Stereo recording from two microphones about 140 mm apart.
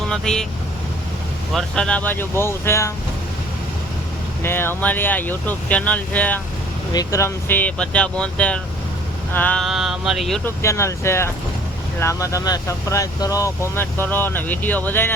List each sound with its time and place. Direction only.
0.1 s speech: 5° left (ahead or behind)
1.5 s speech: 5° left (ahead or behind)
4.4 s speech: 15° left (ahead or behind)
6.9 s speech: 25° left (ahead or behind)
9.6 s speech: centre (ahead or behind)
10.4 s speech: 20° left (ahead or behind)